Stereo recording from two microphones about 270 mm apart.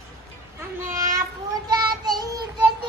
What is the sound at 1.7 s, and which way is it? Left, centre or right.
Child singing, centre.